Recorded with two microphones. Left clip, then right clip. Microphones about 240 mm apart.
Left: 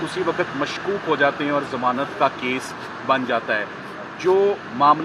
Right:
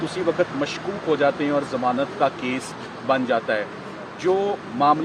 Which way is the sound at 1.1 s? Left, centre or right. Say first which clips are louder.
Even; centre.